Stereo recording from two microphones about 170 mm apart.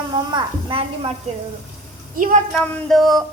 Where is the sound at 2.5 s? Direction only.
5° left (ahead or behind).